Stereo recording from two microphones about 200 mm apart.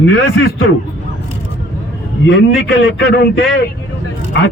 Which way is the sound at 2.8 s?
55° left (ahead or behind).